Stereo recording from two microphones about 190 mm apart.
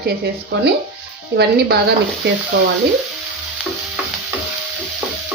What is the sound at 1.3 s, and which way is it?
Speech, 60° right (ahead or behind).